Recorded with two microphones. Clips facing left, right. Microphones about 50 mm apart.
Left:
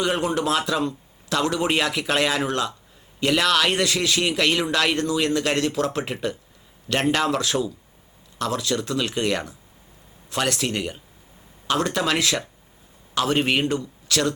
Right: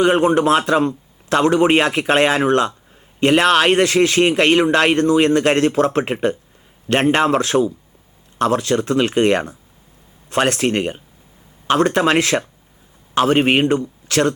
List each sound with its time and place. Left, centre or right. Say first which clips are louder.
0.0 s a man's voice: right 9 dB; right